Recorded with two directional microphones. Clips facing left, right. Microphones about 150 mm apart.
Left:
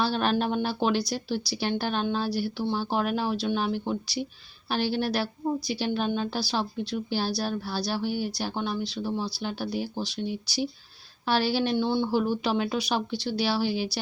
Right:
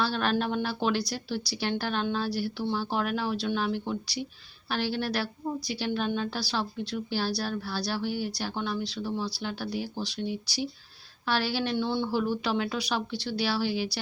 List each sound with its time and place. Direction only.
0.0 s a woman's voice: 20° left (ahead or behind)
11.3 s a woman's voice: 20° left (ahead or behind)